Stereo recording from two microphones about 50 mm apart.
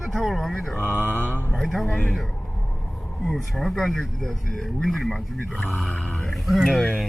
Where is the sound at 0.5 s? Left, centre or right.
Centre.